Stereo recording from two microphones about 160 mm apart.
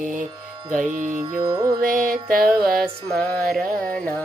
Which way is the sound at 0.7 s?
50° right (ahead or behind).